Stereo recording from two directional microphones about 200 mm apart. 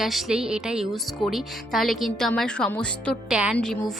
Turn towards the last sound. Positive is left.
turn(degrees=0)  # may be behind; listen again after turning